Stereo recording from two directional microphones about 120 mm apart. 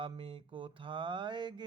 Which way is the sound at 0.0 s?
45° right (ahead or behind).